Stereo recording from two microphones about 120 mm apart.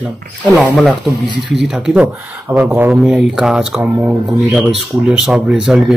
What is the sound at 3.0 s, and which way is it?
Speech, 5° right (ahead or behind).